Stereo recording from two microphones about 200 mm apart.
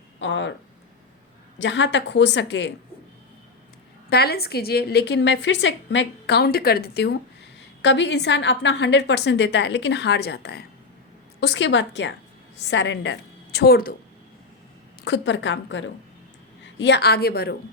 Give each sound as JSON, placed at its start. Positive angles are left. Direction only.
{"t": 0.2, "sound": "a woman's voice", "side_deg": 65}
{"t": 1.5, "sound": "a woman's voice", "side_deg": 65}
{"t": 4.1, "sound": "a woman's voice", "side_deg": 50}
{"t": 15.0, "sound": "a woman's voice", "side_deg": 60}